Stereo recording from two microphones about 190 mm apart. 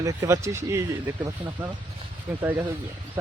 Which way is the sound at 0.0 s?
15° right (ahead or behind).